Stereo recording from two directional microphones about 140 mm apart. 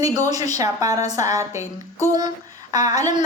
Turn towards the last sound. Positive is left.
turn(degrees=-25)  # may be behind; listen again after turning